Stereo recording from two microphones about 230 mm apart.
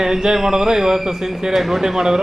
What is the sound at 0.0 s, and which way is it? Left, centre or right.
Speech, centre.